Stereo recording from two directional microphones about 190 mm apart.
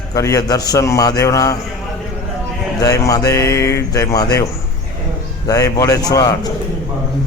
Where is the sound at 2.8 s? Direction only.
20° left (ahead or behind).